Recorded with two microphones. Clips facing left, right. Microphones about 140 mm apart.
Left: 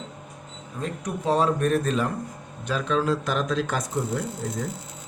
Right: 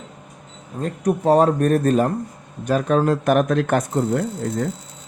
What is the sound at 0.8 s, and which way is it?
A man's voice, 45° right (ahead or behind).